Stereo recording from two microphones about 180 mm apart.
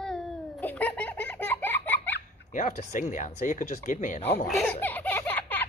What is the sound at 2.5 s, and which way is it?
Speech, 45° left (ahead or behind).